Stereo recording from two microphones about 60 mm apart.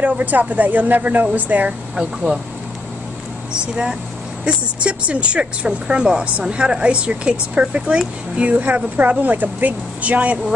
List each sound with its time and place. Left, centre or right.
0.0 s a woman's voice: right
2.0 s speech: centre
3.5 s a woman's voice: centre